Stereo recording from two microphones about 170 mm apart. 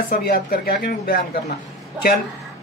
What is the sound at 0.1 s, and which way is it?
Speech, 65° left (ahead or behind).